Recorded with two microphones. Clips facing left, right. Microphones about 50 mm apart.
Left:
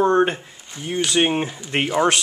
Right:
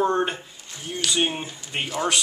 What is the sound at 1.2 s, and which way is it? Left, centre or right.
Speech, left.